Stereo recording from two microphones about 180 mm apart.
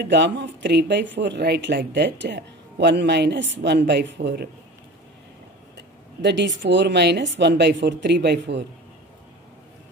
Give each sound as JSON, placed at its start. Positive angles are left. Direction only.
{"t": 0.0, "sound": "speech", "side_deg": -75}
{"t": 5.8, "sound": "speech", "side_deg": -75}